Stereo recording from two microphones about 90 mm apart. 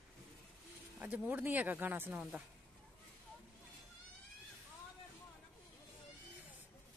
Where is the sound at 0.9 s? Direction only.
20° right (ahead or behind).